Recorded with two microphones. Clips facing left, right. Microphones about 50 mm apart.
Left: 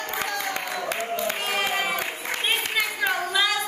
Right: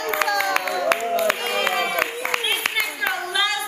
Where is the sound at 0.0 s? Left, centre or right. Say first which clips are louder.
Right 7 dB; right.